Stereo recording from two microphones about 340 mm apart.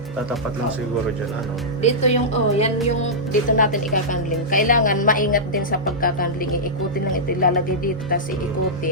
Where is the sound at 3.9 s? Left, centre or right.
Left.